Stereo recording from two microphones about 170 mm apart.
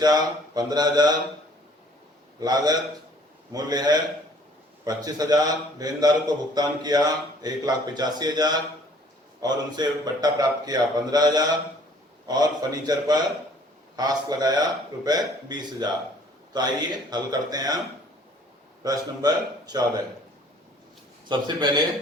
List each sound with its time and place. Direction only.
0.0 s a man's voice: 25° right (ahead or behind)
2.4 s a man's voice: 25° right (ahead or behind)
18.8 s a man's voice: 20° right (ahead or behind)
21.2 s a man's voice: 25° right (ahead or behind)